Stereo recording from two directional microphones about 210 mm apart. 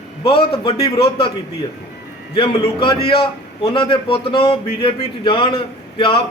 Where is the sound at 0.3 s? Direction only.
25° left (ahead or behind).